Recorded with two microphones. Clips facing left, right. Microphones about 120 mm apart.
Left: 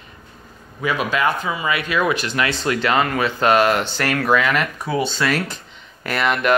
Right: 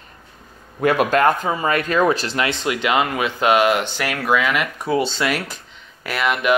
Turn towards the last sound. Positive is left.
turn(degrees=-5)  # may be behind; listen again after turning